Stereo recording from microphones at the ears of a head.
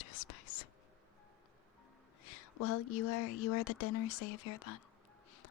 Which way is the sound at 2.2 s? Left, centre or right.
Left.